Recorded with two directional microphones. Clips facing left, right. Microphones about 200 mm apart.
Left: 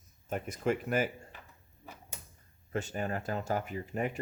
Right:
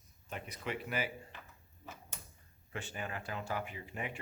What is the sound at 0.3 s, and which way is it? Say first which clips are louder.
Speech: left 10 dB; 45° left (ahead or behind).